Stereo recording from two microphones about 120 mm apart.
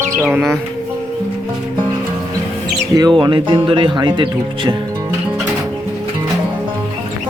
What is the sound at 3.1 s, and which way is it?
Speech, 40° right (ahead or behind).